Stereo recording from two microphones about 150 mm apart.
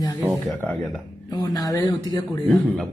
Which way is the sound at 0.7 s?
Centre (ahead or behind).